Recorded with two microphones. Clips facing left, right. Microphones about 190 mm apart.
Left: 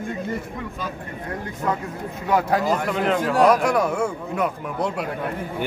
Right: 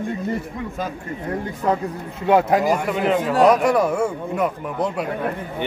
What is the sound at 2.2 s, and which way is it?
A man's voice, 25° right (ahead or behind).